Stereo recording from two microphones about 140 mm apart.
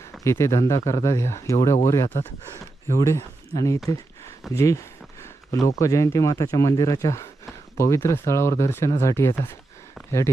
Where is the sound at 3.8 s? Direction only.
25° left (ahead or behind).